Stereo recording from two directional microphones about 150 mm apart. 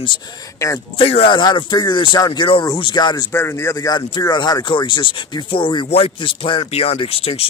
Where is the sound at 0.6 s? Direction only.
20° left (ahead or behind).